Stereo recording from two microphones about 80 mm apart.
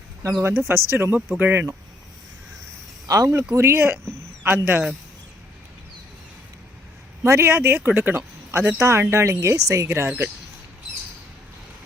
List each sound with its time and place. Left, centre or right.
0.4 s speech: right
3.1 s speech: right
7.3 s speech: right